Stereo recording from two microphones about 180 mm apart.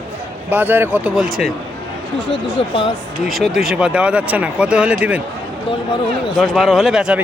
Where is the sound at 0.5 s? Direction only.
10° right (ahead or behind).